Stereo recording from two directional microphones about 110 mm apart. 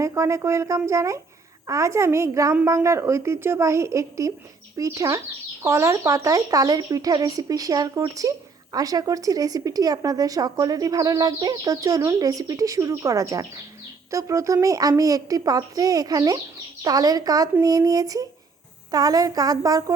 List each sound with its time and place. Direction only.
0.0 s a woman's voice: 25° right (ahead or behind)